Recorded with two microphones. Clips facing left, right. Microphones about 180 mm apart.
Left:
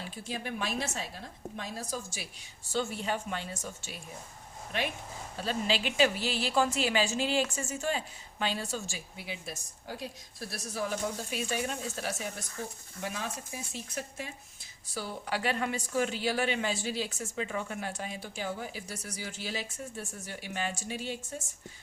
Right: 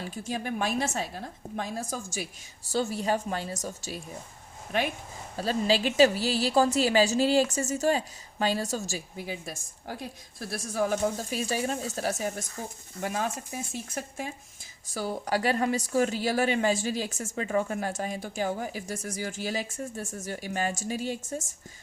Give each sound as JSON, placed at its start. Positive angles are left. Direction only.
{"t": 0.0, "sound": "a woman's voice", "side_deg": -45}
{"t": 5.4, "sound": "a woman's voice", "side_deg": -40}